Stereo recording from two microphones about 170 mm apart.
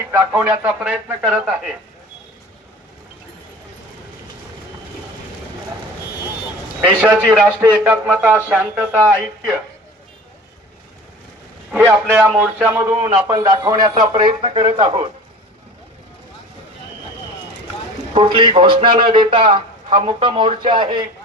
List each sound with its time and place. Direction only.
0.0 s speech: 15° right (ahead or behind)
6.8 s speech: 10° right (ahead or behind)
11.7 s a man's voice: 15° right (ahead or behind); by 15.1 s 30° right (ahead or behind)
18.1 s a man's voice: 30° right (ahead or behind)